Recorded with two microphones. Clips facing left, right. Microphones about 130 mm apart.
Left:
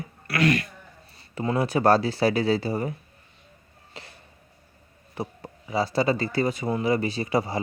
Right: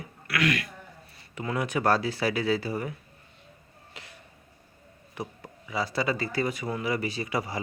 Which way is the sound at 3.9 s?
30° left (ahead or behind).